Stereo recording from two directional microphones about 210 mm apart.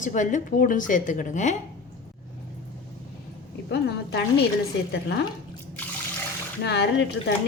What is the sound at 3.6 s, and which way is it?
Speech, 55° left (ahead or behind).